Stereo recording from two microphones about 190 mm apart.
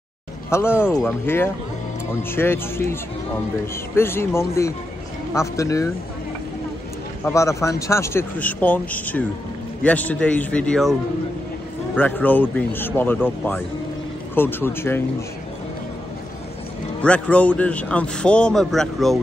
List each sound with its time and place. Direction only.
0.5 s speech: 10° left (ahead or behind)
7.2 s speech: 15° left (ahead or behind)
17.0 s a man's voice: 5° left (ahead or behind)